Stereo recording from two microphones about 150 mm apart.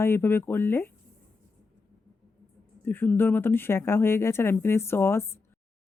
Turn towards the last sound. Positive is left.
turn(degrees=15)  # may be behind; listen again after turning